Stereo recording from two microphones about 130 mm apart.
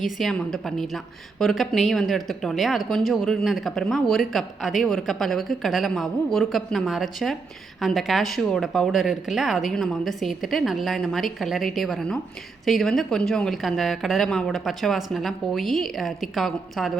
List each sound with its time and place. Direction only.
0.0 s a woman's voice: centre (ahead or behind)